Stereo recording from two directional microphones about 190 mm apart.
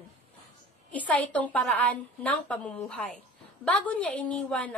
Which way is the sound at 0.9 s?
10° left (ahead or behind).